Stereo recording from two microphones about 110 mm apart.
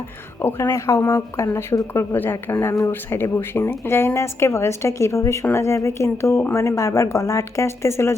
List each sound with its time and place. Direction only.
0.4 s speech: 20° left (ahead or behind)